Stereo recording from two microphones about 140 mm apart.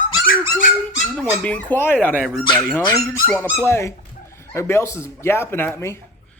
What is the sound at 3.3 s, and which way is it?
Speech, 10° right (ahead or behind).